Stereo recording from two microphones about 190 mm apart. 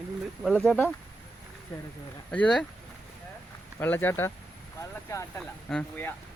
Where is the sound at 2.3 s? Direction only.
5° left (ahead or behind).